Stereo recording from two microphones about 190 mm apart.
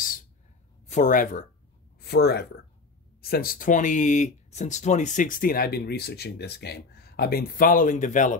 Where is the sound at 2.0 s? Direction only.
55° left (ahead or behind).